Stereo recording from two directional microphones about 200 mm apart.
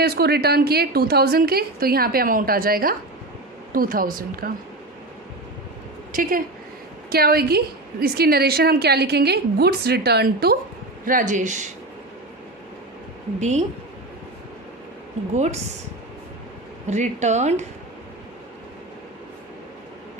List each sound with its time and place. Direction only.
0.0 s a woman's voice: 55° right (ahead or behind)
6.1 s a woman's voice: 45° right (ahead or behind)
13.4 s a woman's voice: 35° right (ahead or behind)
15.4 s a woman's voice: 35° right (ahead or behind)
16.8 s a woman's voice: 35° right (ahead or behind)